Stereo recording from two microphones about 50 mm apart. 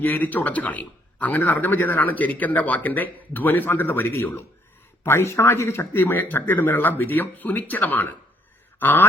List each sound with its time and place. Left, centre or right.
0.0 s speech: left
5.0 s speech: left